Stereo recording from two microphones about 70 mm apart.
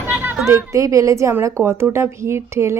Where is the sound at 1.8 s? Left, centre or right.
Right.